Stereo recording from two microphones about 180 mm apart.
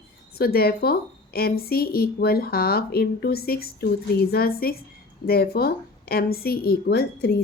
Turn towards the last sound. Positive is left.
turn(degrees=60)  # may be behind; listen again after turning